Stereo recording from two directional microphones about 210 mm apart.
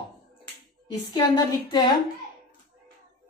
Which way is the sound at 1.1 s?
20° left (ahead or behind).